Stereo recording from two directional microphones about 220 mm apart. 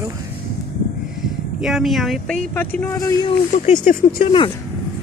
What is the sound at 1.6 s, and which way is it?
Speech, centre (ahead or behind).